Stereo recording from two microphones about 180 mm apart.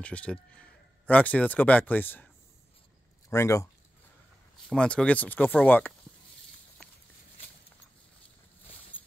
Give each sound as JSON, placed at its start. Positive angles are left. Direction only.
{"t": 0.0, "sound": "speech", "side_deg": 5}
{"t": 4.6, "sound": "speech", "side_deg": 5}